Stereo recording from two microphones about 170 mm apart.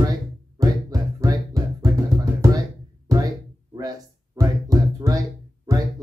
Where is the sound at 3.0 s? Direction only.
20° right (ahead or behind).